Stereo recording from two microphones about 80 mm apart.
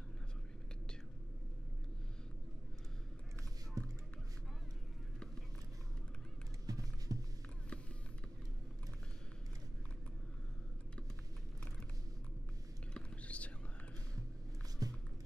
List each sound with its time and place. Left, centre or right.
3.8 s music: right
6.6 s music: right
12.9 s whispering: centre
14.8 s a sound: right